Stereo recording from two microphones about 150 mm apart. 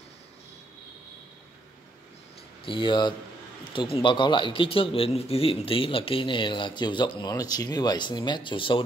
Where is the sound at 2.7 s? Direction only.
35° left (ahead or behind).